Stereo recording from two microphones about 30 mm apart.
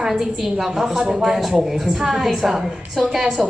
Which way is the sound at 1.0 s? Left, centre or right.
Right.